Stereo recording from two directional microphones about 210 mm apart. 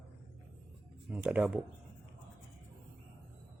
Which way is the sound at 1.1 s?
5° right (ahead or behind).